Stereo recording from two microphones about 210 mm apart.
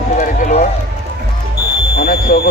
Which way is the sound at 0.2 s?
35° left (ahead or behind).